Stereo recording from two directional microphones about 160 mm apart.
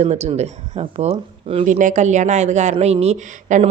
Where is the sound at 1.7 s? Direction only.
50° right (ahead or behind).